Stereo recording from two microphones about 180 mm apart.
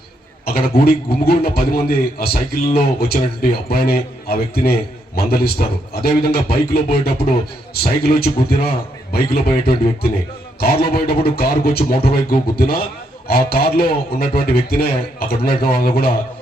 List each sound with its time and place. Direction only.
0.4 s a man's voice: 60° left (ahead or behind)